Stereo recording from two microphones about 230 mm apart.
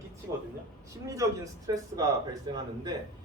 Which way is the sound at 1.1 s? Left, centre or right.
Centre.